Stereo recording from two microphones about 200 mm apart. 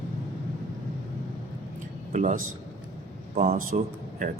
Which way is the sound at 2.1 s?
40° right (ahead or behind).